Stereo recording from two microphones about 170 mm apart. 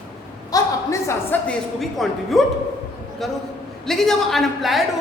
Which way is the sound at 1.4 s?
Centre (ahead or behind).